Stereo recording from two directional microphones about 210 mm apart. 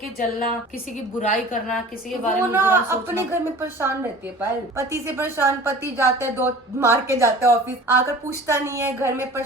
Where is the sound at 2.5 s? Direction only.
10° right (ahead or behind).